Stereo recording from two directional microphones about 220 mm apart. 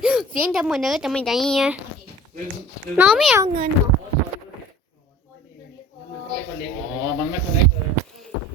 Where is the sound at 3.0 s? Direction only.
Centre (ahead or behind).